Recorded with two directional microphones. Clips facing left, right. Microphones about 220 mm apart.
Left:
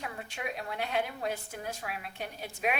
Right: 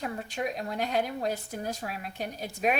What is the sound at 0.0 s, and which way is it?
A woman's voice, 40° right (ahead or behind).